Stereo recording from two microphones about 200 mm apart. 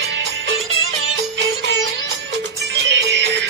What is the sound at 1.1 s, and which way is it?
Music, 60° right (ahead or behind).